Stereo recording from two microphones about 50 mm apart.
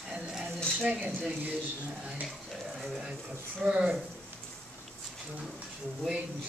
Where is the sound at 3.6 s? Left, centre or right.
Centre.